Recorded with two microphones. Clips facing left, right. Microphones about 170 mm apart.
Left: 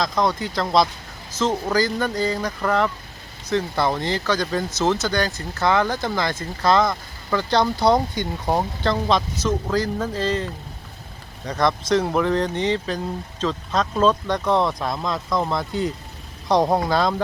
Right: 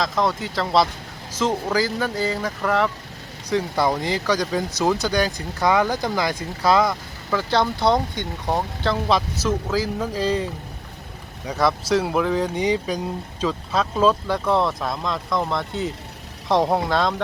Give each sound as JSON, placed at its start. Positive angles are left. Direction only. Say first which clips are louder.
{"t": 0.0, "sound": "speech", "louder": "left 1 dB", "side_deg": 0}
{"t": 11.4, "sound": "speech", "louder": "even", "side_deg": -5}